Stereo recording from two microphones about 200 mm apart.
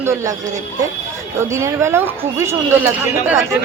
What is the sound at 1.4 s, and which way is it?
Speech, 15° right (ahead or behind).